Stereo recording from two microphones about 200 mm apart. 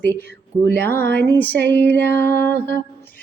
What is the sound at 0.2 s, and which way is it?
Speech, 60° right (ahead or behind).